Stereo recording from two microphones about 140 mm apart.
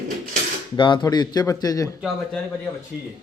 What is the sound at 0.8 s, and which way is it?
Speech, 35° left (ahead or behind).